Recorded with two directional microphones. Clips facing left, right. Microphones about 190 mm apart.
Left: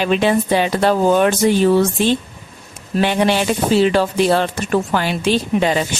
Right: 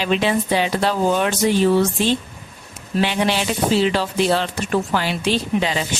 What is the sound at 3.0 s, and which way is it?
A woman's voice, 50° left (ahead or behind).